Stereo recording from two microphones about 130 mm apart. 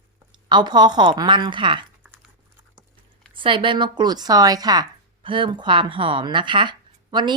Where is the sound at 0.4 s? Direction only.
35° right (ahead or behind).